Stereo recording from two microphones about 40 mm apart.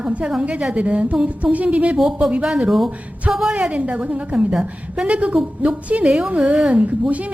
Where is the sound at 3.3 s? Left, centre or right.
Right.